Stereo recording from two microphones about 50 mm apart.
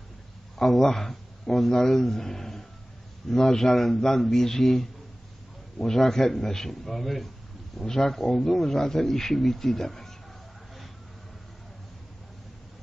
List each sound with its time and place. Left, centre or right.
0.6 s speech: centre